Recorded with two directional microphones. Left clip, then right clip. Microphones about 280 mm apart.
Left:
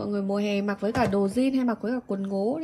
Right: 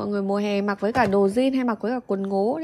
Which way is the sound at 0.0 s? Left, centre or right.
Centre.